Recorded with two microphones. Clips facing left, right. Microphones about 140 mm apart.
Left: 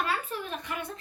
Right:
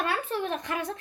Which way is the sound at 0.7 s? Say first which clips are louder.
Right 5 dB; 90° right.